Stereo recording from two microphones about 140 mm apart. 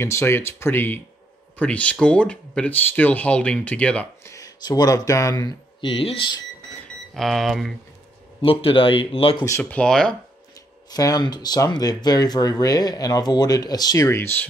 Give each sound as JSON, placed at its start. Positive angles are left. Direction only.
{"t": 0.0, "sound": "speech", "side_deg": 20}
{"t": 4.3, "sound": "speech", "side_deg": 25}
{"t": 7.2, "sound": "speech", "side_deg": 0}
{"t": 8.4, "sound": "speech", "side_deg": 40}
{"t": 9.4, "sound": "speech", "side_deg": 15}
{"t": 10.9, "sound": "speech", "side_deg": 25}